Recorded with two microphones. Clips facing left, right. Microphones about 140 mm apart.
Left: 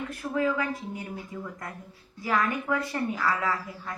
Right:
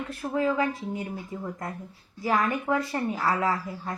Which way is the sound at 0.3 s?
25° right (ahead or behind).